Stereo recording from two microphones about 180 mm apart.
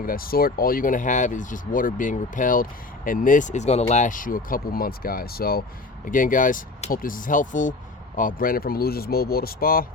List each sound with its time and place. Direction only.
0.0 s speech: 55° left (ahead or behind)